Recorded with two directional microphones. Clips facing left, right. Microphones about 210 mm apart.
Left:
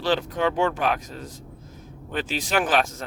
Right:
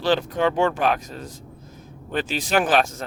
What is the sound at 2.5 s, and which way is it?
Speech, 30° right (ahead or behind).